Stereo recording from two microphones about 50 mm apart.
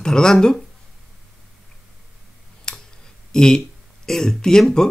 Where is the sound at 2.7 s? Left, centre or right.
Centre.